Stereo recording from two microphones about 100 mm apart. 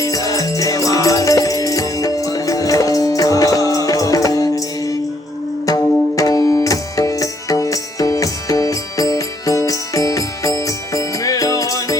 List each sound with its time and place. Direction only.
0.0 s music: 35° left (ahead or behind)
6.1 s music: 35° left (ahead or behind)